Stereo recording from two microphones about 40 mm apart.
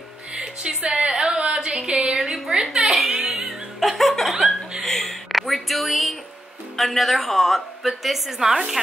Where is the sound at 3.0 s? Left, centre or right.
Centre.